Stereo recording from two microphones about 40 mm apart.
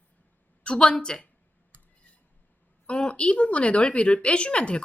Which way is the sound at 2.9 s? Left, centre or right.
Left.